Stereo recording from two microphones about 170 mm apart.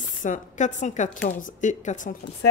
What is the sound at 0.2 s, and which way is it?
Speech, 45° left (ahead or behind).